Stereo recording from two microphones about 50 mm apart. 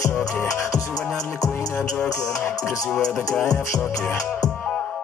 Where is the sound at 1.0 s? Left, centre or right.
Centre.